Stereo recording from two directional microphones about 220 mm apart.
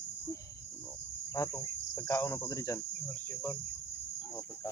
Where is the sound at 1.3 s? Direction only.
15° left (ahead or behind).